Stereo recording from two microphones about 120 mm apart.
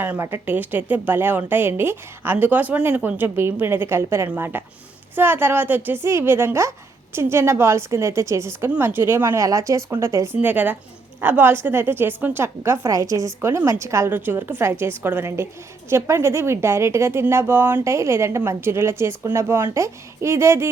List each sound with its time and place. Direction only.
0.0 s a woman's voice: 20° right (ahead or behind)
10.3 s a woman's voice: 15° right (ahead or behind)